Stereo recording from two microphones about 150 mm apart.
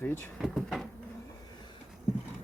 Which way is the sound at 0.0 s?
15° left (ahead or behind).